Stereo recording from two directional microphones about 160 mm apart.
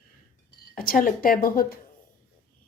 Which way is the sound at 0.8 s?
60° left (ahead or behind).